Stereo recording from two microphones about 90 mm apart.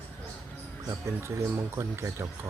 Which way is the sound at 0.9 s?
30° right (ahead or behind).